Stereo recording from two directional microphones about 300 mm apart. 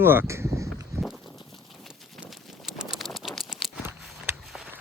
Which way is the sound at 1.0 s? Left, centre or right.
Centre.